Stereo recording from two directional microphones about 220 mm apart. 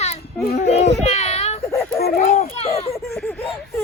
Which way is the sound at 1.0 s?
30° left (ahead or behind).